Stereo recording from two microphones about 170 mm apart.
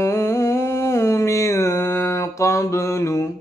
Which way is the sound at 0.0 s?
15° left (ahead or behind).